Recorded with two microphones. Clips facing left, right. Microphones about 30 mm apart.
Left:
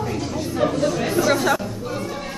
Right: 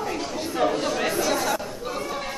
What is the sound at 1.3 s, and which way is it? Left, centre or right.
Chatter, centre.